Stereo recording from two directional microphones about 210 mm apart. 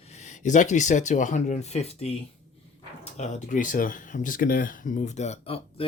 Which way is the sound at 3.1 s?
35° left (ahead or behind).